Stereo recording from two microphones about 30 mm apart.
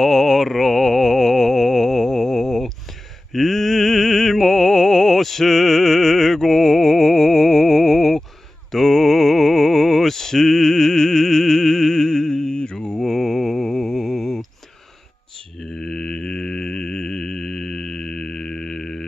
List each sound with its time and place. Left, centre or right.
0.0 s mantra: centre
8.7 s music: centre; by 12.7 s left
12.7 s mantra: left
13.0 s mantra: centre
15.6 s mantra: centre